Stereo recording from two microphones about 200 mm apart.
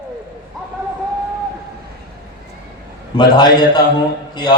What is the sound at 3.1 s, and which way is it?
Speech, 20° left (ahead or behind).